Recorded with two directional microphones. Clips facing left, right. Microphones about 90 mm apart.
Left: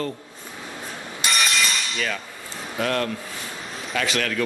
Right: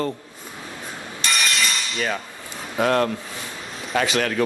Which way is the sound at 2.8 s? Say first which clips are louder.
Right 5 dB; 30° right (ahead or behind).